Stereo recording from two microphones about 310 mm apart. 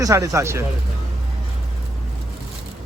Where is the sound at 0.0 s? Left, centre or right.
Centre.